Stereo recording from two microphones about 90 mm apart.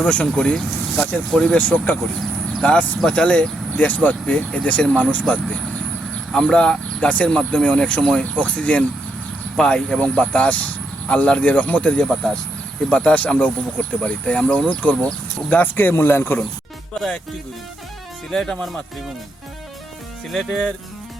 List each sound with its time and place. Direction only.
0.0 s speech: 15° left (ahead or behind)
3.0 s speech: 10° left (ahead or behind)
18.3 s speech: 5° left (ahead or behind)
20.3 s speech: centre (ahead or behind)